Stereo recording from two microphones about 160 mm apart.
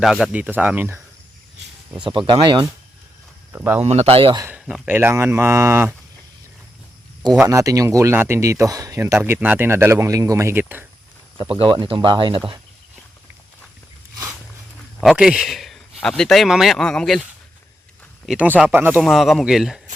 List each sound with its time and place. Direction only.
0.0 s speech: centre (ahead or behind)
2.0 s speech: 30° right (ahead or behind)
3.5 s speech: 10° right (ahead or behind)
3.8 s speech: 40° right (ahead or behind)
4.4 s speech: 15° right (ahead or behind)
4.6 s a man's voice: 5° right (ahead or behind)
4.9 s speech: 15° right (ahead or behind)
7.4 s speech: 20° right (ahead or behind)
11.6 s speech: 30° right (ahead or behind)
15.0 s speech: 5° right (ahead or behind)
18.3 s speech: 10° right (ahead or behind)
19.0 s a man's voice: centre (ahead or behind)